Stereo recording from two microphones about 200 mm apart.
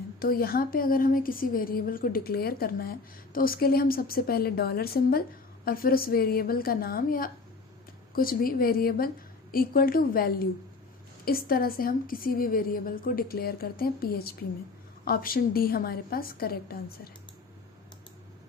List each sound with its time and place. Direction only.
0.2 s a woman's voice: 50° left (ahead or behind)